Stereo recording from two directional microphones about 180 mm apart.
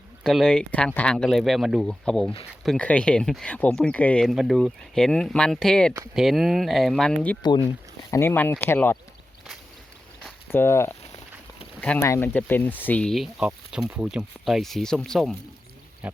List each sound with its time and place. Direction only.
0.2 s speech: centre (ahead or behind)
7.4 s speech: 25° left (ahead or behind)
8.1 s speech: 15° left (ahead or behind)
10.5 s speech: 15° left (ahead or behind); by 16.2 s 5° right (ahead or behind)